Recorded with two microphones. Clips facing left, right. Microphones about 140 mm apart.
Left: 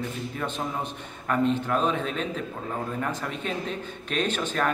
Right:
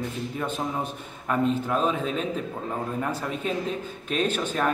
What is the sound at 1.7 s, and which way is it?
Speech, 5° right (ahead or behind).